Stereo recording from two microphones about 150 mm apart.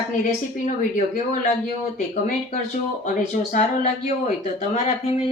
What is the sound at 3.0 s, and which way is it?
Speech, 60° left (ahead or behind).